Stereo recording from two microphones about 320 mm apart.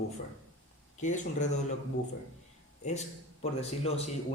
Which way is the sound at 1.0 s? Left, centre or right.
Left.